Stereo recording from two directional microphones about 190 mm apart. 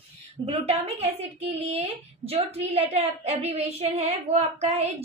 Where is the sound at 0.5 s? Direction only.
30° right (ahead or behind).